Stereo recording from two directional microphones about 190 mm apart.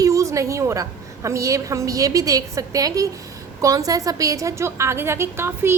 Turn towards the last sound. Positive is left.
turn(degrees=-10)  # may be behind; listen again after turning